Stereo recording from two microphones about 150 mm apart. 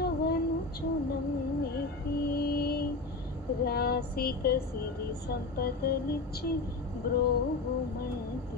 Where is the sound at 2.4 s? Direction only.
90° left.